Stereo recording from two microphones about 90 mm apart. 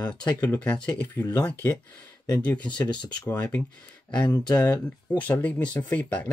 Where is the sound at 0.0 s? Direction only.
15° left (ahead or behind).